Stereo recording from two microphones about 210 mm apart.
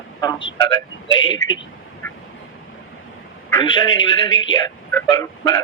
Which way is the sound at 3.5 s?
20° left (ahead or behind).